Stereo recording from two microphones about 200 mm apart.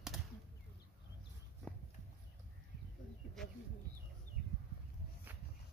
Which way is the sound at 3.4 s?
Centre (ahead or behind).